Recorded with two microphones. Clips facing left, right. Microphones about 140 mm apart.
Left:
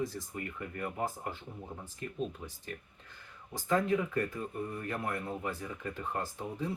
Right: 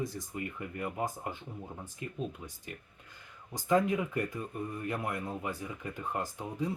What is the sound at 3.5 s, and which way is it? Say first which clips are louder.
Speech: right 2 dB; 15° right (ahead or behind).